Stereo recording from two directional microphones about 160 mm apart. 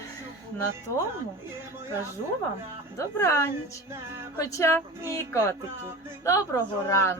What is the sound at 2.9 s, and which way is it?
A woman's voice, 15° left (ahead or behind).